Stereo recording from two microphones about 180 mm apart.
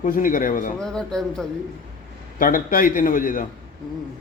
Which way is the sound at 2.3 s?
50° left (ahead or behind).